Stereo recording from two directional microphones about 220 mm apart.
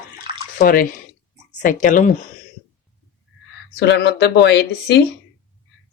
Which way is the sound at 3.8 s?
50° left (ahead or behind).